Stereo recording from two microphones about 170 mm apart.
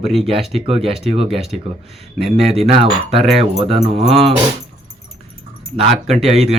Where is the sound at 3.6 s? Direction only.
35° right (ahead or behind).